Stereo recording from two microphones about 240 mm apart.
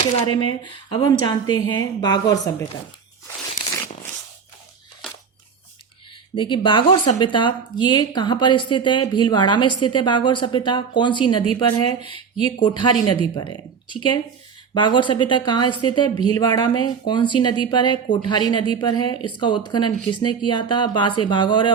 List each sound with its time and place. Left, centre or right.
0.0 s a woman's voice: left
6.3 s a woman's voice: centre